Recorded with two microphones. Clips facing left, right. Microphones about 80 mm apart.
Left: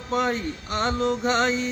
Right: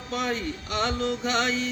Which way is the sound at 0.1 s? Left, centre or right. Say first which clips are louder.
Left 4 dB; left.